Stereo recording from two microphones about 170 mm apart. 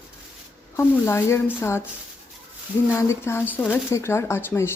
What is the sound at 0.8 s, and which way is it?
Speech, 15° left (ahead or behind).